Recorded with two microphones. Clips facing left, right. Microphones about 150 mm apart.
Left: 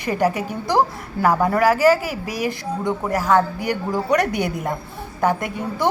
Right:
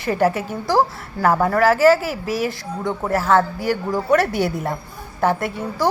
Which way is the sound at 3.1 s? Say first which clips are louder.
Right 1 dB; 15° left (ahead or behind).